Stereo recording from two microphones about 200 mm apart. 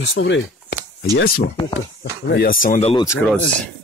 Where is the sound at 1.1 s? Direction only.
65° left (ahead or behind).